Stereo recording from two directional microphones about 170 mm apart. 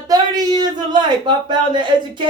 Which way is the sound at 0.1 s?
25° right (ahead or behind).